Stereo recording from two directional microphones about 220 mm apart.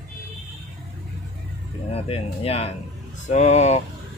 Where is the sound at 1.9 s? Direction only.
25° left (ahead or behind).